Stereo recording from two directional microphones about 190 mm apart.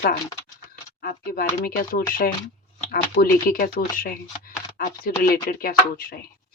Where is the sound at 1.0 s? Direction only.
50° left (ahead or behind).